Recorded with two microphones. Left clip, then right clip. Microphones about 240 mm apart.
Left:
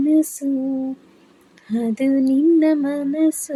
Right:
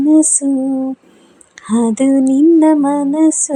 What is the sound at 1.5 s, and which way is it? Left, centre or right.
Female singing, right.